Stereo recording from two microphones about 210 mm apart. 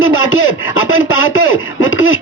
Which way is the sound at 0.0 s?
70° left (ahead or behind).